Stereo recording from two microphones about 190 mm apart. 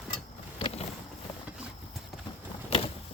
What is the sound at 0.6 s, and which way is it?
Boat, 35° left (ahead or behind).